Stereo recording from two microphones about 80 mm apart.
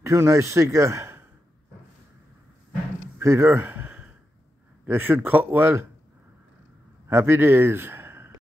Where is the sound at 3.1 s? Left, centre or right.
Right.